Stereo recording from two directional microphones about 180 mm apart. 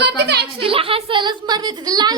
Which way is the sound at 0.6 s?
30° right (ahead or behind).